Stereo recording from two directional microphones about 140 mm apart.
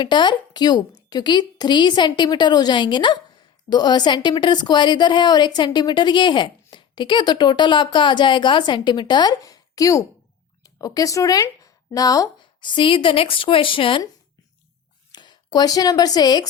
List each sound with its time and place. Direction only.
0.0 s a woman's voice: 30° left (ahead or behind)
15.1 s a woman's voice: 30° left (ahead or behind)